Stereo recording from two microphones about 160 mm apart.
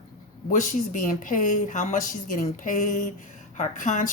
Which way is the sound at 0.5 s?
50° left (ahead or behind).